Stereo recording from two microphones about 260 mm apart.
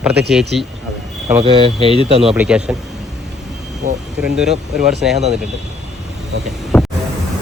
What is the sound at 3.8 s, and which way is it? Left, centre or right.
Speech, right.